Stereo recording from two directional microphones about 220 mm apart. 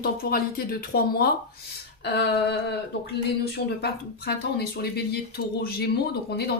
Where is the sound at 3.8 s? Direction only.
45° left (ahead or behind).